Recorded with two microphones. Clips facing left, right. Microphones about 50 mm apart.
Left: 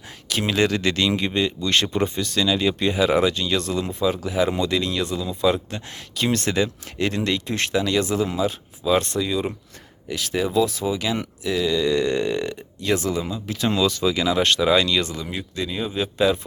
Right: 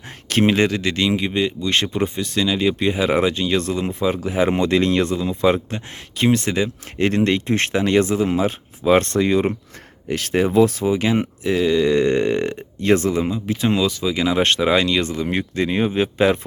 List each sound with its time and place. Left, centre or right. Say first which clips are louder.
0.3 s speech: right 8 dB; right
0.7 s speech: right 1 dB; centre; by 5.5 s right
5.5 s speech: right 3 dB; right
7.0 s speech: right 5 dB; right
13.8 s speech: even; centre
14.2 s speech: right 4 dB; right
15.3 s speech: right 7 dB; right